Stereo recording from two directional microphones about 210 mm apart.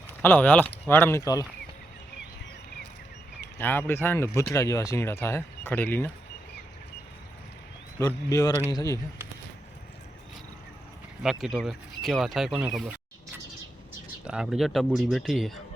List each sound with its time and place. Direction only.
0.2 s speech: 10° left (ahead or behind)
3.6 s speech: 10° left (ahead or behind)
7.9 s speech: 15° left (ahead or behind)
11.2 s speech: centre (ahead or behind)
14.3 s speech: 5° right (ahead or behind)